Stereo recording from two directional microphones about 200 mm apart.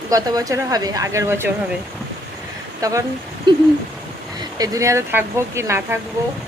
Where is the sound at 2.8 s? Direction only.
15° right (ahead or behind).